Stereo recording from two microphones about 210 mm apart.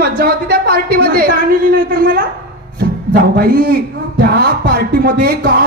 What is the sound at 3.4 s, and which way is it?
Speech, 45° right (ahead or behind).